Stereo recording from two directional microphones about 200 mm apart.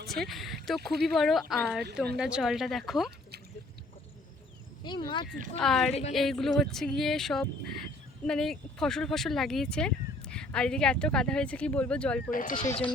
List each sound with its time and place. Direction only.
0.3 s speech: centre (ahead or behind)
4.8 s speech: 25° left (ahead or behind)
5.5 s speech: centre (ahead or behind)
5.9 s speech: 35° left (ahead or behind)
6.1 s speech: centre (ahead or behind)
12.3 s speech: 40° left (ahead or behind)
12.6 s speech: 25° left (ahead or behind)